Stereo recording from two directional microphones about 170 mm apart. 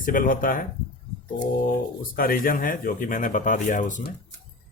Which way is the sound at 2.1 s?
60° left (ahead or behind).